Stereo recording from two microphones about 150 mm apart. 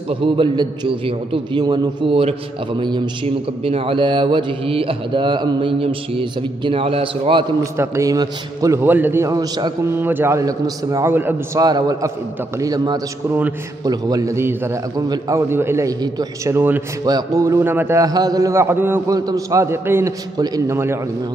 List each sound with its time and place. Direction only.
0.1 s speech: 35° right (ahead or behind)
3.6 s speech: 40° right (ahead or behind)
7.7 s a man's voice: 20° right (ahead or behind)
9.9 s a man's voice: 15° right (ahead or behind)
11.6 s a man's voice: 25° right (ahead or behind)